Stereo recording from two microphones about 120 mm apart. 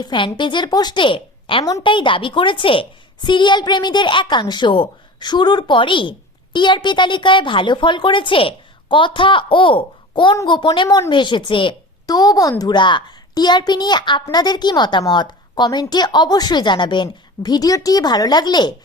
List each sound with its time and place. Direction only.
0.0 s a woman's voice: 40° left (ahead or behind)